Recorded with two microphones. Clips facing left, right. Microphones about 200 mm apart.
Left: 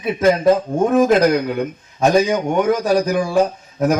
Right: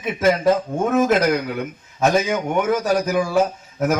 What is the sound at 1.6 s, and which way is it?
A man's voice, 35° left (ahead or behind).